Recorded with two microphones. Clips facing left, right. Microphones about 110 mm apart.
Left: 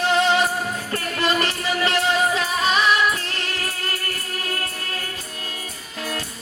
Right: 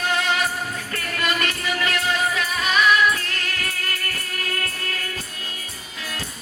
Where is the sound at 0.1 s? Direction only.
30° left (ahead or behind).